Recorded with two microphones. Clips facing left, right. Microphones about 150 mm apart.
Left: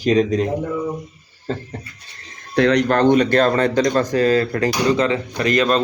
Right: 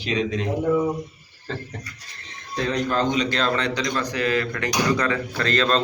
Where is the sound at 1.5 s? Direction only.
35° left (ahead or behind).